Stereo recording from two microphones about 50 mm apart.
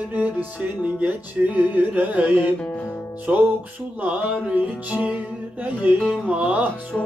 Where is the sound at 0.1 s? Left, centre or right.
Right.